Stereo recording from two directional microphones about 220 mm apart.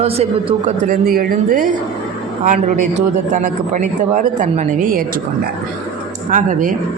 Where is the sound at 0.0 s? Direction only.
30° right (ahead or behind).